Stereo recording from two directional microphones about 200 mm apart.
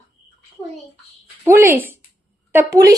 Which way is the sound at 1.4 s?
15° right (ahead or behind).